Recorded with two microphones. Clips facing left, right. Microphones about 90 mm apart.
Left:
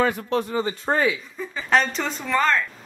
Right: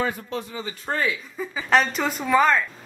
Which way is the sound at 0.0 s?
65° left (ahead or behind).